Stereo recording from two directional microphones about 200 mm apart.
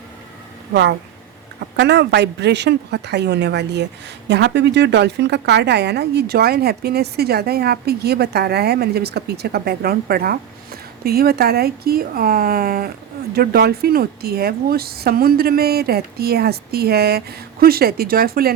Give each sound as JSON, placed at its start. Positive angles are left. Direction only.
{"t": 0.7, "sound": "a woman's voice", "side_deg": -60}